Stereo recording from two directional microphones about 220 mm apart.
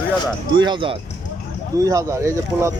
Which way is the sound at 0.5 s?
20° right (ahead or behind).